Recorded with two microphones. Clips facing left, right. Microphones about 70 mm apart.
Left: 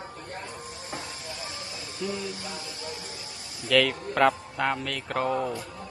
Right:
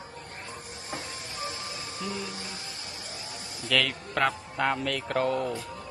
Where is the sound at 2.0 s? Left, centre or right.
Right.